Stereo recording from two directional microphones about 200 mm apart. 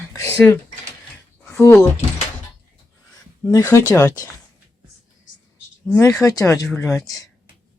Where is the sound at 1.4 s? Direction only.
10° left (ahead or behind).